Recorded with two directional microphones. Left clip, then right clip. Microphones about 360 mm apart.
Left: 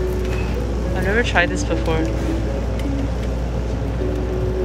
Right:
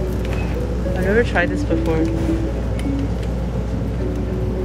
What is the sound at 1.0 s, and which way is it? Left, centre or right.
Speech, centre.